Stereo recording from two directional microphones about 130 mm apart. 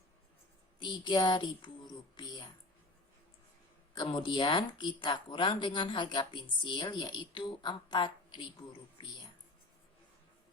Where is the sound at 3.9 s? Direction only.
40° left (ahead or behind).